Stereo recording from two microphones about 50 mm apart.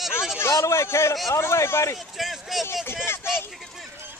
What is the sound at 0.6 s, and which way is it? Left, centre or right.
A man's voice, left.